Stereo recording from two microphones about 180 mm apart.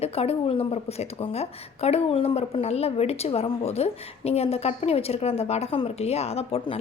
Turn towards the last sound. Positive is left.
turn(degrees=30)  # may be behind; listen again after turning